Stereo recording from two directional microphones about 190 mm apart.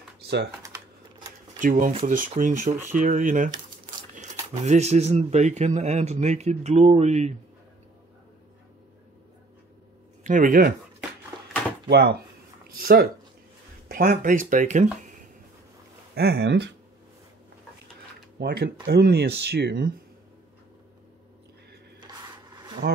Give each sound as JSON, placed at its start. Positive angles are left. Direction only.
{"t": 1.6, "sound": "speech", "side_deg": -45}
{"t": 10.2, "sound": "speech", "side_deg": -45}
{"t": 11.9, "sound": "speech", "side_deg": -60}
{"t": 16.2, "sound": "speech", "side_deg": -60}
{"t": 18.4, "sound": "speech", "side_deg": -55}